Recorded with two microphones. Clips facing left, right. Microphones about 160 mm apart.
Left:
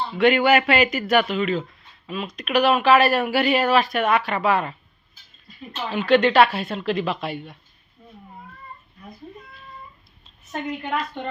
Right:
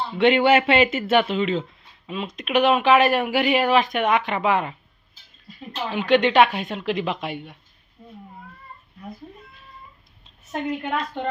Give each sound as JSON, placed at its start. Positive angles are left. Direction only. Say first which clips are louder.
{"t": 0.2, "sound": "speech", "louder": "even", "side_deg": -25}
{"t": 5.9, "sound": "a woman's voice", "louder": "left 1 dB", "side_deg": -15}
{"t": 8.0, "sound": "cat", "louder": "right 3 dB", "side_deg": -15}
{"t": 10.5, "sound": "a woman's voice", "louder": "right 1 dB", "side_deg": -5}